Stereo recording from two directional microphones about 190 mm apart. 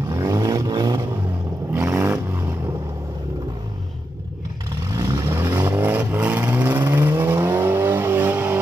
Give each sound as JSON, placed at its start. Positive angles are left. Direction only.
{"t": 0.1, "sound": "vehicle", "side_deg": -20}
{"t": 4.9, "sound": "vehicle", "side_deg": -20}